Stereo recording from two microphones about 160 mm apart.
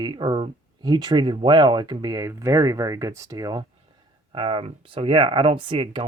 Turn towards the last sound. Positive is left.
turn(degrees=-30)  # may be behind; listen again after turning